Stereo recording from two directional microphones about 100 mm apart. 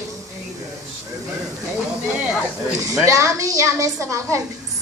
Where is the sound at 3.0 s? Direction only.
30° right (ahead or behind).